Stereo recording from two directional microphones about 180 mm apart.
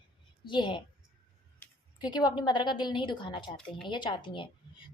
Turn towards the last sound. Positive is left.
turn(degrees=25)  # may be behind; listen again after turning